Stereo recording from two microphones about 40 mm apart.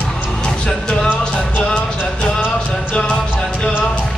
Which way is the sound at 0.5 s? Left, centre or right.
Centre.